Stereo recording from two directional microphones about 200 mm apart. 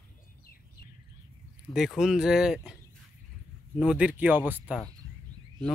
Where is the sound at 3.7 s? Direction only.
5° right (ahead or behind).